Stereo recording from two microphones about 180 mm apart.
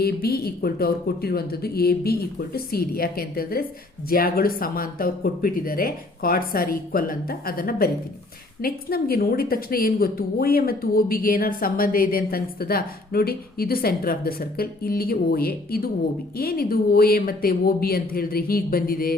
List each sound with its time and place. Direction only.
0.0 s a woman's voice: 60° left (ahead or behind)